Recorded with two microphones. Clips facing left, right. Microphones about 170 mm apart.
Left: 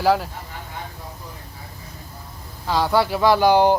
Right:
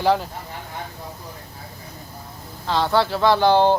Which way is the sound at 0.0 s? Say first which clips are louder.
Left 1 dB; 5° left (ahead or behind).